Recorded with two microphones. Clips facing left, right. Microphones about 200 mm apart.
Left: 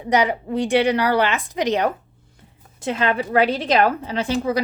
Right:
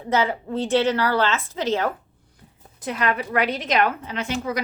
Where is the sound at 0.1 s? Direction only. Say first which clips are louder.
Left 3 dB; 15° left (ahead or behind).